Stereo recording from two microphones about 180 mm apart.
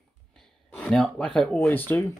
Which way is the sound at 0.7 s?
5° left (ahead or behind).